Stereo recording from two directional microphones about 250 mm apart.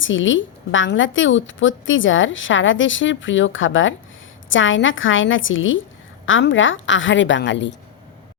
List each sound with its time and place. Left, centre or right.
0.0 s a woman's voice: left